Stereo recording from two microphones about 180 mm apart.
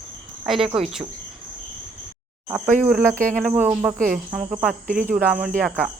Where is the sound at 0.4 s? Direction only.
Centre (ahead or behind).